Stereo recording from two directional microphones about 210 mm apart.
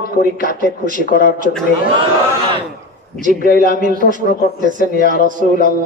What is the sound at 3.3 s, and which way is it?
Speech, 40° left (ahead or behind).